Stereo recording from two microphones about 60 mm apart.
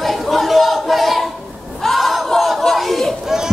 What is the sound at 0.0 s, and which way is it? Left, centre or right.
Chatter, centre.